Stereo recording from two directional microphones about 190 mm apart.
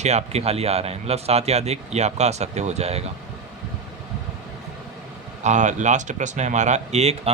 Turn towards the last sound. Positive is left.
turn(degrees=-35)  # may be behind; listen again after turning